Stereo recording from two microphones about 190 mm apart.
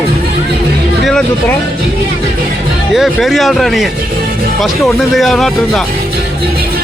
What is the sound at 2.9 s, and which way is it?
Speech, centre (ahead or behind).